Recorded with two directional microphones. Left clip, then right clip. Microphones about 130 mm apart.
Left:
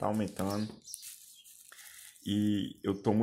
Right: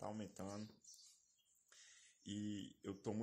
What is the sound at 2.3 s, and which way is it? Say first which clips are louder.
Speech: left 17 dB; 10° right (ahead or behind).